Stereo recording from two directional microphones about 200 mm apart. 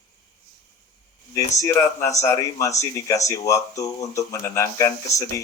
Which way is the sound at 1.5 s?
15° left (ahead or behind).